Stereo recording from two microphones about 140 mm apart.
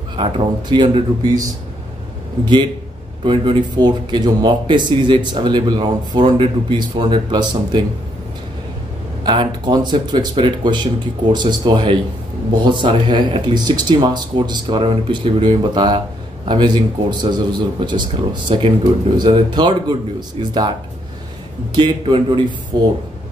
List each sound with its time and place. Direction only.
0.1 s speech: 35° right (ahead or behind)
2.4 s speech: 35° right (ahead or behind)
9.2 s speech: 35° right (ahead or behind)
21.7 s speech: 35° right (ahead or behind)